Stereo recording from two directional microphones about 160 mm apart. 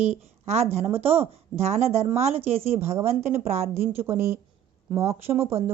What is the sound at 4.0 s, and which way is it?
Speech, 15° right (ahead or behind).